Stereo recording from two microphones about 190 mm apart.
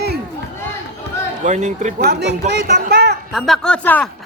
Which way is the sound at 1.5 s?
40° right (ahead or behind).